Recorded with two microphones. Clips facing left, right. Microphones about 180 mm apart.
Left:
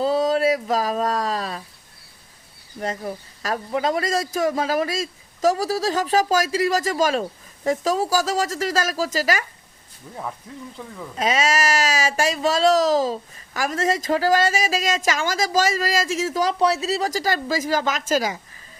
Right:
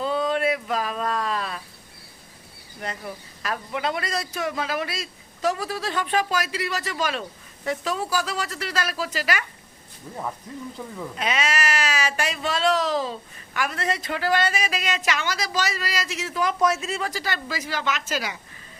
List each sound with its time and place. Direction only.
0.0 s a sound: 35° left (ahead or behind)
2.8 s speech: 40° left (ahead or behind)
10.5 s speech: 5° left (ahead or behind)
11.2 s speech: 40° left (ahead or behind)